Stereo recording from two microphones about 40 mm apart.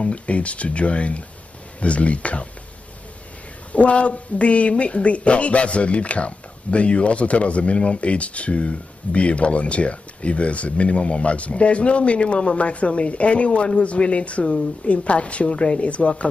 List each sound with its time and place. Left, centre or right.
0.0 s speech: left
3.7 s speech: left